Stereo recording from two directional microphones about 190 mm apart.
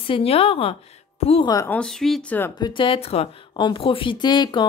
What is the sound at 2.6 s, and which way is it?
Speech, 25° left (ahead or behind).